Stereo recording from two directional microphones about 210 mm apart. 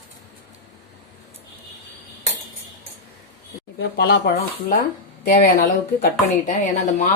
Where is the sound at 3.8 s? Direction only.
50° left (ahead or behind); by 7.0 s 35° left (ahead or behind).